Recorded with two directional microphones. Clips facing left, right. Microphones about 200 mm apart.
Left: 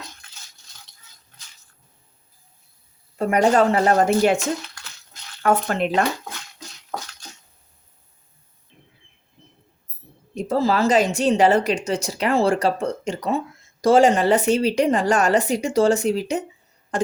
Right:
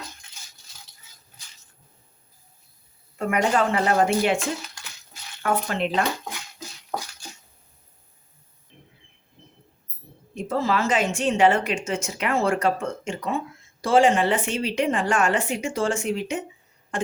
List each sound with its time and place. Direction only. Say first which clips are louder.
3.2 s speech: left 5 dB; 35° left (ahead or behind)
5.4 s speech: left 4 dB; 45° left (ahead or behind)
10.3 s speech: left 4 dB; 35° left (ahead or behind)